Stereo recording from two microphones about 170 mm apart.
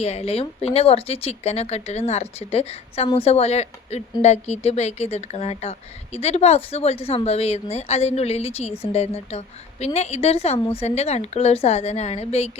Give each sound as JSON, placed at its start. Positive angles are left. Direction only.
{"t": 0.0, "sound": "speech", "side_deg": 40}